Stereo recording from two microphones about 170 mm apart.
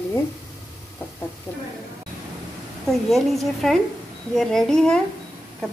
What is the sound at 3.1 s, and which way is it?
Speech, centre (ahead or behind).